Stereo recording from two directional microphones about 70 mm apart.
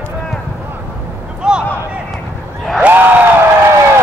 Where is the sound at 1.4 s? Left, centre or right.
Centre.